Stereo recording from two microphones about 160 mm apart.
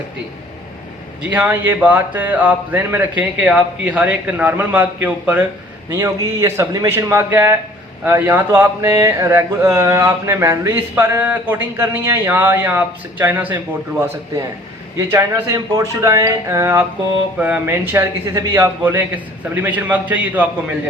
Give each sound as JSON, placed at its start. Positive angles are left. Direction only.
{"t": 1.3, "sound": "speech", "side_deg": -10}
{"t": 14.9, "sound": "speech", "side_deg": -15}